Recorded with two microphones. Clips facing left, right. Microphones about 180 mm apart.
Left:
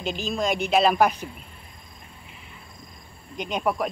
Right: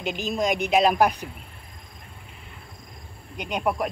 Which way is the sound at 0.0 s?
15° right (ahead or behind).